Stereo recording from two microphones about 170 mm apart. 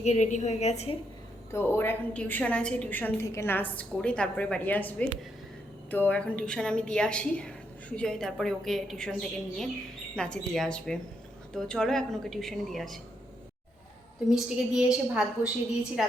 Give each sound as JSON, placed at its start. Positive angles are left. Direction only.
{"t": 0.0, "sound": "a woman's voice", "side_deg": 40}
{"t": 1.5, "sound": "a woman's voice", "side_deg": 10}
{"t": 14.3, "sound": "a woman's voice", "side_deg": -5}